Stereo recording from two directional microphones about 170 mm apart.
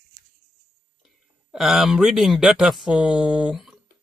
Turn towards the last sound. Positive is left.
turn(degrees=-5)  # may be behind; listen again after turning